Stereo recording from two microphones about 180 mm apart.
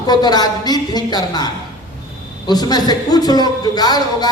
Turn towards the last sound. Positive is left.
turn(degrees=20)  # may be behind; listen again after turning